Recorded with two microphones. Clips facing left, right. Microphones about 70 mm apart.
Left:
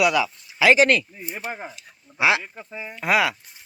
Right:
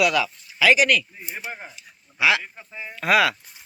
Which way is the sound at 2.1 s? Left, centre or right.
Left.